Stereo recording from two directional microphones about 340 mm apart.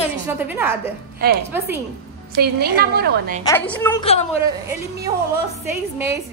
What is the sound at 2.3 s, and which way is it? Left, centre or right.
A woman's voice, right.